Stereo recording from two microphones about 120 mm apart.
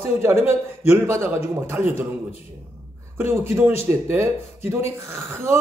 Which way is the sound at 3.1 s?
20° right (ahead or behind).